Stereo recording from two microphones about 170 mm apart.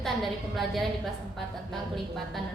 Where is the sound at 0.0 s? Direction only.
Centre (ahead or behind).